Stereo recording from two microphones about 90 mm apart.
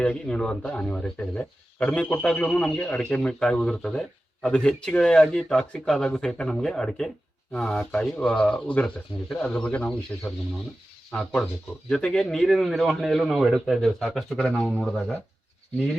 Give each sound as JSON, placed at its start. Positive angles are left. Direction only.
{"t": 0.0, "sound": "speech", "side_deg": 10}
{"t": 11.2, "sound": "a man's voice", "side_deg": 5}